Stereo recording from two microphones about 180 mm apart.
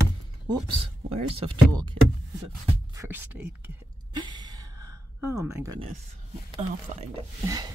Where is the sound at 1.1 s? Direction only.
30° right (ahead or behind); by 3.7 s 10° right (ahead or behind).